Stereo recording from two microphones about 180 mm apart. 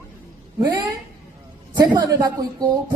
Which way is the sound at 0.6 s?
20° right (ahead or behind).